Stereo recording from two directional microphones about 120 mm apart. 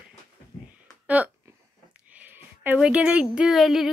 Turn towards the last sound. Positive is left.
turn(degrees=0)  # may be behind; listen again after turning